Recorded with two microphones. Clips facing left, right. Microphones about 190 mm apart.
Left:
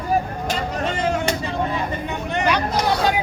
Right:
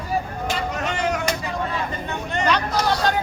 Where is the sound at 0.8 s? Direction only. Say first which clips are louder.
Left 3 dB; 30° left (ahead or behind).